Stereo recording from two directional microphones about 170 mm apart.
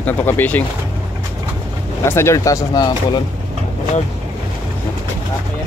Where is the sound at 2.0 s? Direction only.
15° left (ahead or behind).